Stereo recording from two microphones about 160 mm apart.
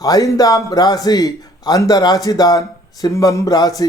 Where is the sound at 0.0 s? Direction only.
20° left (ahead or behind).